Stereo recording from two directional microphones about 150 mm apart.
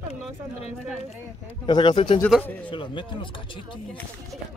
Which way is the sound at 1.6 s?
30° left (ahead or behind).